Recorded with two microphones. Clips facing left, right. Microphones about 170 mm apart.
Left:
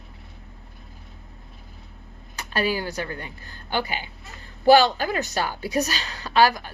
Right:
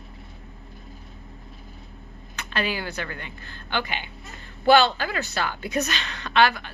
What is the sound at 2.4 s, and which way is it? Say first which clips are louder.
A woman's voice: left 3 dB; 40° left (ahead or behind).